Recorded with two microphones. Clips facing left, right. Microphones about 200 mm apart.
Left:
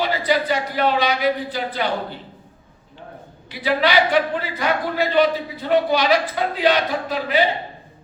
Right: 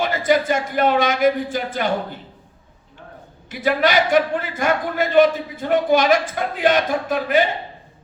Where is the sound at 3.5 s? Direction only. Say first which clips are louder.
Right 1 dB; 45° right (ahead or behind).